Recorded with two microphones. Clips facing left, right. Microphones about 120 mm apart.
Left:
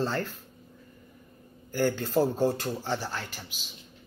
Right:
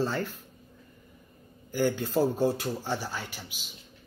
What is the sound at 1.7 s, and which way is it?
A man's voice, 10° right (ahead or behind).